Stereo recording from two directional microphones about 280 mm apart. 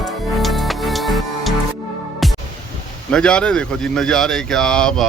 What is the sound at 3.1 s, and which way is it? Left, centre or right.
Speech, centre.